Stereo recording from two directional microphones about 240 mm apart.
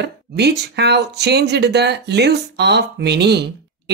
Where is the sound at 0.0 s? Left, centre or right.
Right.